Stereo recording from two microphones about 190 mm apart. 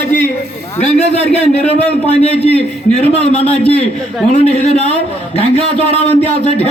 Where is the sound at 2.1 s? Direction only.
35° left (ahead or behind).